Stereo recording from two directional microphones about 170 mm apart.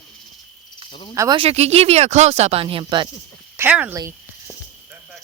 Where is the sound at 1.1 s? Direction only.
20° right (ahead or behind).